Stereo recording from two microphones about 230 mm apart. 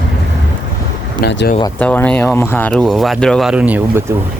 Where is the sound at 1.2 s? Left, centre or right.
Left.